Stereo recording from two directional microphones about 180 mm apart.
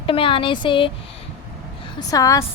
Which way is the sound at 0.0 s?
30° left (ahead or behind).